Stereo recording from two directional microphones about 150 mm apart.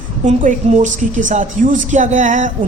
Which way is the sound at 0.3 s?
55° right (ahead or behind).